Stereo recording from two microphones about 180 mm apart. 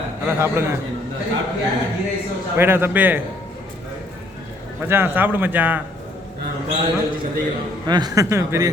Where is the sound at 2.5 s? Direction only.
10° right (ahead or behind).